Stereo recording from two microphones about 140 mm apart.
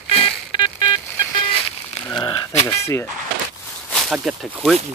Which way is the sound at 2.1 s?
30° left (ahead or behind).